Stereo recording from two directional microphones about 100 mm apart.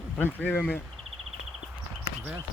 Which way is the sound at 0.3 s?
15° left (ahead or behind).